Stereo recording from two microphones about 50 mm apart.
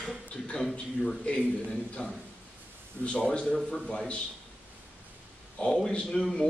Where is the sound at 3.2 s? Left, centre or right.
Centre.